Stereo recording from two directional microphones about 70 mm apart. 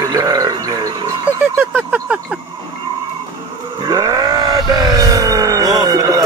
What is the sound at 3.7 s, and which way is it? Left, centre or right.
Vehicle, right.